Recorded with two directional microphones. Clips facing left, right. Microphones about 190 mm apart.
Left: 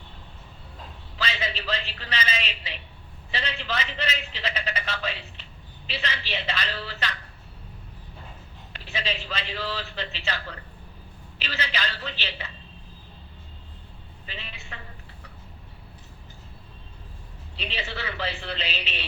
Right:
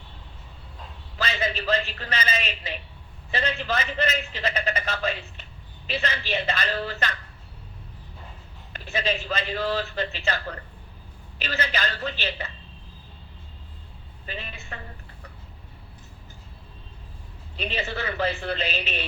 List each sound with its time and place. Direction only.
1.2 s a man's voice: 50° right (ahead or behind)
8.7 s a man's voice: 45° right (ahead or behind)
14.3 s a man's voice: 45° right (ahead or behind)
17.6 s a man's voice: 45° right (ahead or behind)